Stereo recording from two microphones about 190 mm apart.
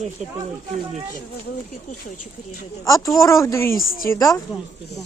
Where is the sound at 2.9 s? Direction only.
15° left (ahead or behind).